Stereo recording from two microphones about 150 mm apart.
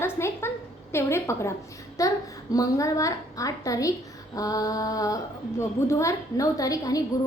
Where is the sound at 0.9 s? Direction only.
20° left (ahead or behind).